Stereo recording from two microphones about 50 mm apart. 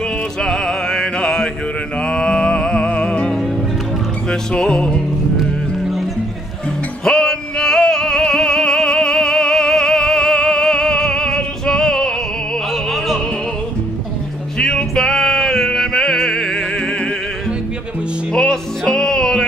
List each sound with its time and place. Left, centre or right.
0.4 s music: centre
5.8 s music: centre
7.1 s music: centre
14.6 s music: centre
18.3 s music: centre